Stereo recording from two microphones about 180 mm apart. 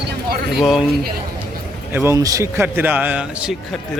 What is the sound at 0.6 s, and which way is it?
Speech, centre (ahead or behind).